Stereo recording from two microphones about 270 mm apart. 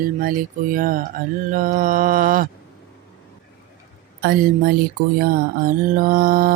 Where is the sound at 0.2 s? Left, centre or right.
Right.